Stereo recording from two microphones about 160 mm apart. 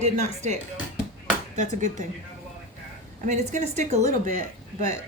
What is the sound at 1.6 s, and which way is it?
Speech, 50° right (ahead or behind).